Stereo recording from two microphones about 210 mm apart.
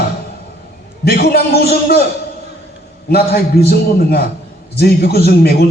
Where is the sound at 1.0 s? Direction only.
45° left (ahead or behind).